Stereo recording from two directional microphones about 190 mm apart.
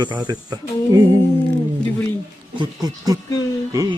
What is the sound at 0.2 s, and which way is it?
Speech, 20° right (ahead or behind).